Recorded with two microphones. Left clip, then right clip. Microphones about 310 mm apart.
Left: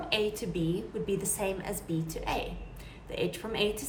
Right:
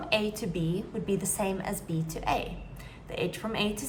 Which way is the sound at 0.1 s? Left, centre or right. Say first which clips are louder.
Right 2 dB; centre.